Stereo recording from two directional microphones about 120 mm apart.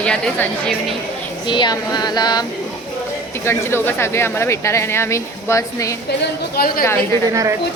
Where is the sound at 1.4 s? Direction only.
40° left (ahead or behind).